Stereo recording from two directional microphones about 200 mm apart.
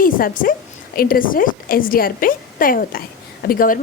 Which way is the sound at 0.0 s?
45° left (ahead or behind).